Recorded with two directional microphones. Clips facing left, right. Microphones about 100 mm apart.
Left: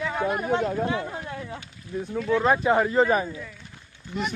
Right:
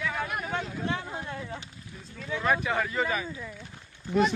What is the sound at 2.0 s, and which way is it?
Speech, 60° left (ahead or behind).